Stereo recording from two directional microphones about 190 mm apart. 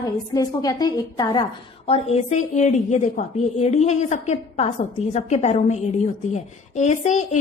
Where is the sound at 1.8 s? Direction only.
30° left (ahead or behind).